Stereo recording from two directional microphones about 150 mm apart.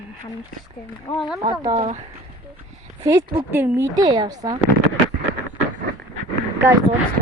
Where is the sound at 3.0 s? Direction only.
20° right (ahead or behind).